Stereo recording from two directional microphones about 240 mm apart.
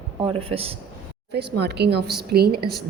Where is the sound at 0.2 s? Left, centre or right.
Right.